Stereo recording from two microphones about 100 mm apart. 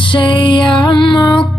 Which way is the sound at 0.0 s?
55° left (ahead or behind).